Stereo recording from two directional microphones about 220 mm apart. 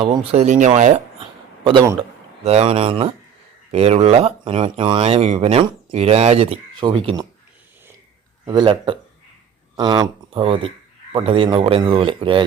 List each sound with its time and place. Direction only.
0.0 s speech: 25° right (ahead or behind)
1.6 s speech: 15° right (ahead or behind)
2.4 s speech: 30° right (ahead or behind)
8.4 s speech: 20° right (ahead or behind)